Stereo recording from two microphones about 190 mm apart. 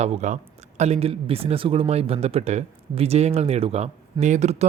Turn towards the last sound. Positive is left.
turn(degrees=-35)  # may be behind; listen again after turning